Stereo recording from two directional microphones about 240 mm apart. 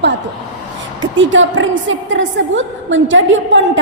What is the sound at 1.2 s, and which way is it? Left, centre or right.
A woman's voice, right.